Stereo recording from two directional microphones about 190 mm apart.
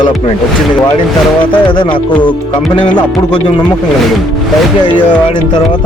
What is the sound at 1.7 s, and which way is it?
Speech, 25° left (ahead or behind).